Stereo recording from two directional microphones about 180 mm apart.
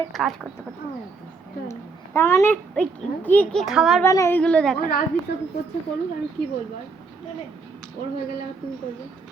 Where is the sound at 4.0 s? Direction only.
15° left (ahead or behind).